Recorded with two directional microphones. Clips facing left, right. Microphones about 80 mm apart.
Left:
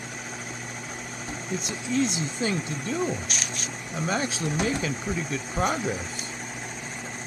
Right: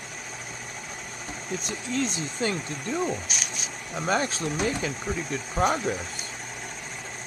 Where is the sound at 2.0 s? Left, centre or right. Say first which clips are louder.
Left 1 dB; right.